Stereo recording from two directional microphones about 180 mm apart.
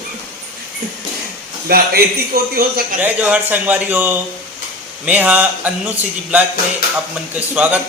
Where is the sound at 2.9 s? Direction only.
10° right (ahead or behind).